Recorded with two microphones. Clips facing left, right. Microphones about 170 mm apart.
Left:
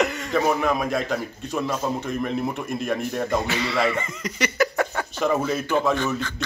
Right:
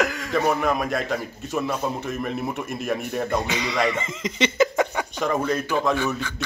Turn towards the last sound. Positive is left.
turn(degrees=-10)  # may be behind; listen again after turning